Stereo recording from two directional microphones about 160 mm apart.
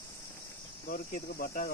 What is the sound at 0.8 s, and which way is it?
Speech, 60° left (ahead or behind).